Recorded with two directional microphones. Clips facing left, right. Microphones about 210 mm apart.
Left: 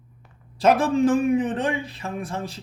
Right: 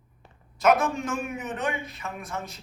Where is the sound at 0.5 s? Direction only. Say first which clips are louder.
Left 4 dB; 30° left (ahead or behind).